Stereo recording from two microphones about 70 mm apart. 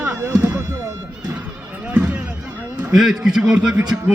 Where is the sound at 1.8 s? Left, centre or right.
Right.